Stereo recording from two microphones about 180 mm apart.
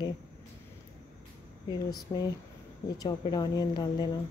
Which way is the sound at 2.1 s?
25° left (ahead or behind).